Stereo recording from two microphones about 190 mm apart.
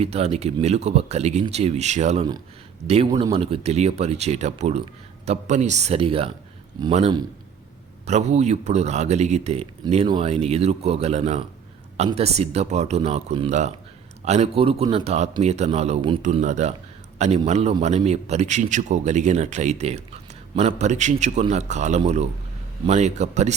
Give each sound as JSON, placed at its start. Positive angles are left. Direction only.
{"t": 0.0, "sound": "a man's voice", "side_deg": -35}